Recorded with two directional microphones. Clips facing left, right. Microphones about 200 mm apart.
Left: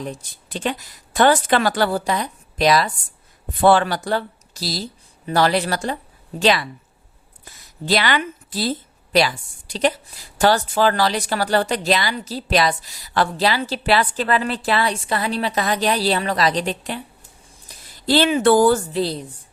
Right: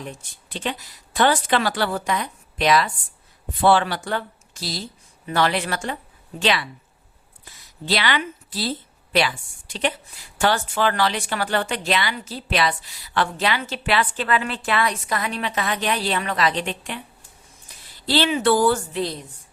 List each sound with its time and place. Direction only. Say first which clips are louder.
0.0 s a woman's voice: left 5 dB; 35° left (ahead or behind)
17.7 s speech: left 5 dB; 45° left (ahead or behind)